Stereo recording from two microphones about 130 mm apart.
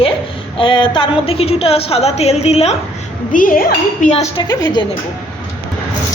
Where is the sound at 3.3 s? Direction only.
90° left.